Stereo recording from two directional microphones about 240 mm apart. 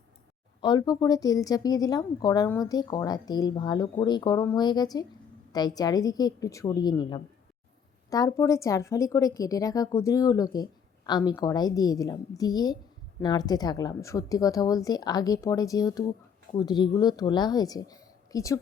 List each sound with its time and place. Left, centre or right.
0.6 s a woman's voice: centre